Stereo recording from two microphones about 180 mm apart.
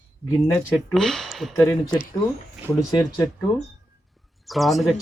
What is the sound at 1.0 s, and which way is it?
Speech, centre (ahead or behind).